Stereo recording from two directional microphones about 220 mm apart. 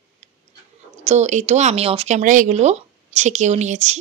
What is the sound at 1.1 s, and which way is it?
Speech, 30° right (ahead or behind).